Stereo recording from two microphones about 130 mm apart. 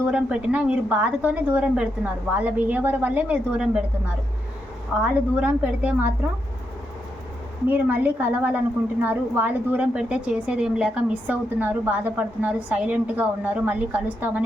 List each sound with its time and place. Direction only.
0.0 s a woman's voice: 10° right (ahead or behind)
4.9 s a woman's voice: 10° right (ahead or behind)
7.7 s a woman's voice: 15° right (ahead or behind)